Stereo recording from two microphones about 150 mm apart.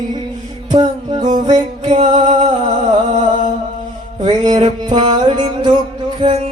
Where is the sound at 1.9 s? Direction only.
50° right (ahead or behind).